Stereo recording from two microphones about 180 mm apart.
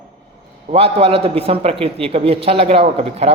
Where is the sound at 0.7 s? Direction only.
30° right (ahead or behind).